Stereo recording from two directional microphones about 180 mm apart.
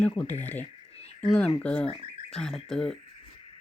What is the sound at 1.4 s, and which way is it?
A woman's voice, 5° left (ahead or behind).